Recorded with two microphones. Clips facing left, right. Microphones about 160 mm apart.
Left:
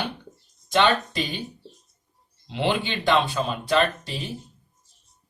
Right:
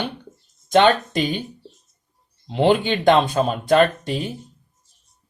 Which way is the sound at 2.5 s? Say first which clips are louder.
Right 8 dB; 45° right (ahead or behind).